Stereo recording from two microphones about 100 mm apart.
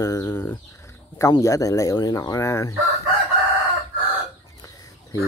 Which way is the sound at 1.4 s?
35° left (ahead or behind).